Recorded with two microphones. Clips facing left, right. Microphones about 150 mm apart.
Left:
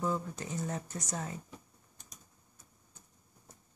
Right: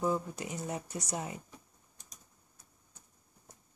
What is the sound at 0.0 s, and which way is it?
Speech, 15° right (ahead or behind).